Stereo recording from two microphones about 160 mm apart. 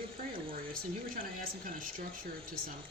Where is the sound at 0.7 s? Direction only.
60° right (ahead or behind).